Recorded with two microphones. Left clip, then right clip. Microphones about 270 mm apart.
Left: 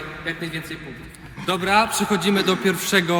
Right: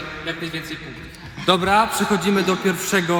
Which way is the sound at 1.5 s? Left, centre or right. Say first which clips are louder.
Right 5 dB; centre.